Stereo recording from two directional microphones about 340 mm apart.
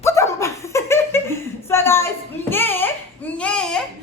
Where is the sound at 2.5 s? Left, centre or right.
Centre.